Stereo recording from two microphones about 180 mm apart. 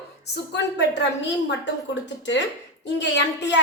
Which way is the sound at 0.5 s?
75° left (ahead or behind).